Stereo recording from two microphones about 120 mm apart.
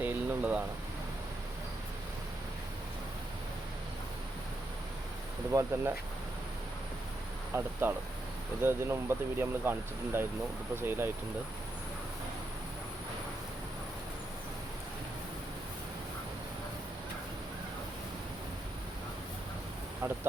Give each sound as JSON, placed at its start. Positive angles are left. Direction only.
{"t": 0.0, "sound": "a sound", "side_deg": -10}
{"t": 5.5, "sound": "speech", "side_deg": -20}
{"t": 7.5, "sound": "speech", "side_deg": -20}